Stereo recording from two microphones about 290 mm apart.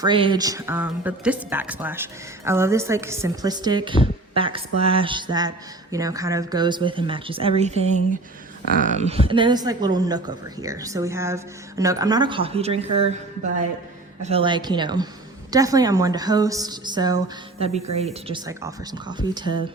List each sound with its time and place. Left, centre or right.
0.0 s a woman's voice: centre
14.2 s a woman's voice: right